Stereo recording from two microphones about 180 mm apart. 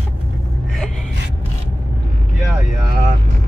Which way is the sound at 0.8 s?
5° left (ahead or behind).